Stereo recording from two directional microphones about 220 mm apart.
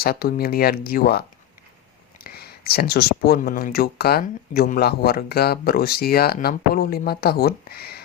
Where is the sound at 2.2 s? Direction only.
45° left (ahead or behind).